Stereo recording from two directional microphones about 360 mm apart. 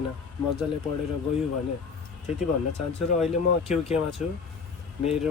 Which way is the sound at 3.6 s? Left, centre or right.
Centre.